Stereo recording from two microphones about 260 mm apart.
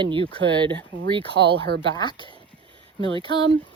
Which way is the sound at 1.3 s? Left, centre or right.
Right.